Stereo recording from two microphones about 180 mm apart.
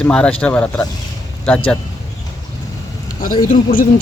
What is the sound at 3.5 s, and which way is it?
Speech, 50° left (ahead or behind).